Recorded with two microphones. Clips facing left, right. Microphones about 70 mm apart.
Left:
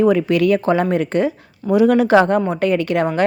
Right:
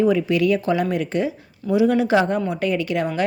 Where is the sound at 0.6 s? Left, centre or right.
Left.